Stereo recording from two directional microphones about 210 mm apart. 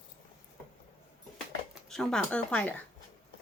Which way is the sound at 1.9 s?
Centre (ahead or behind).